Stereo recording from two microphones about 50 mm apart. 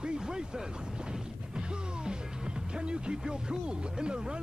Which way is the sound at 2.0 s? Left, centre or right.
Centre.